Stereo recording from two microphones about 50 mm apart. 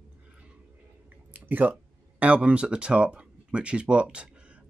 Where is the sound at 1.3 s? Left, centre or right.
Right.